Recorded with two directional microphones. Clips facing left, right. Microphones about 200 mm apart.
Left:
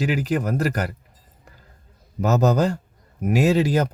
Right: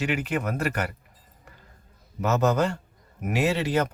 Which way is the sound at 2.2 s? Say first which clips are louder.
Left 4 dB; 40° left (ahead or behind).